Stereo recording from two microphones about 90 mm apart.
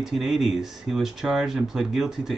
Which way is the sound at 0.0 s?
5° right (ahead or behind).